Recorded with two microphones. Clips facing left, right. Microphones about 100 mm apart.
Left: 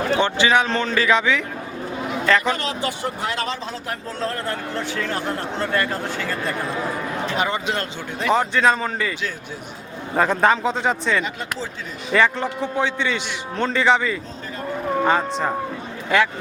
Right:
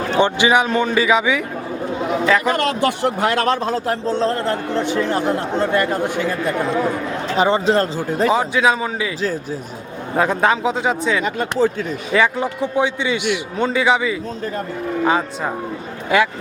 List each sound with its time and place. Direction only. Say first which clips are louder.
0.2 s a man's voice: right 6 dB; 15° right (ahead or behind)
2.6 s speech: right 7 dB; 65° right (ahead or behind)
3.8 s speech: right 6 dB; 25° right (ahead or behind)
7.3 s speech: right 10 dB; 30° right (ahead or behind)
8.3 s speech: left 1 dB; 5° right (ahead or behind)
10.2 s speech: right 1 dB; 5° right (ahead or behind)
11.2 s speech: right 9 dB; 50° right (ahead or behind)
12.1 s a man's voice: right 1 dB; 10° right (ahead or behind)